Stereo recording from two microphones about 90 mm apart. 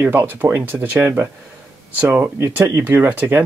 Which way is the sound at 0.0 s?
25° right (ahead or behind).